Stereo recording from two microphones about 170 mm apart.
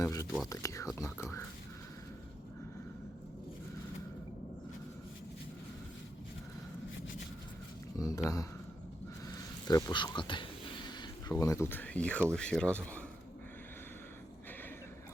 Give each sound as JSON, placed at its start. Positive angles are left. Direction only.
{"t": 0.0, "sound": "a sound", "side_deg": 20}
{"t": 0.5, "sound": "speech", "side_deg": 20}
{"t": 7.9, "sound": "speech", "side_deg": 20}
{"t": 9.6, "sound": "speech", "side_deg": 20}